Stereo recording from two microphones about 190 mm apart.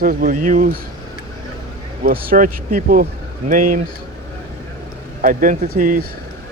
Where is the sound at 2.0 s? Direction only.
45° right (ahead or behind).